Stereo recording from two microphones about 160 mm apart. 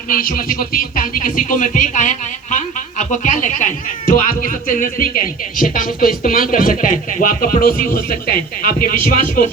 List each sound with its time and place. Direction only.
0.1 s speech: 60° left (ahead or behind)